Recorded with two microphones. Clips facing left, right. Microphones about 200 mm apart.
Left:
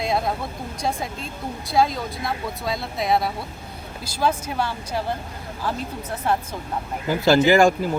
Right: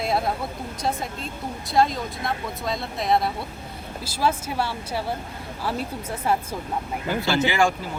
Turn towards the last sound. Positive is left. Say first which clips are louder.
# left 6 dB
turn(degrees=45)  # may be behind; listen again after turning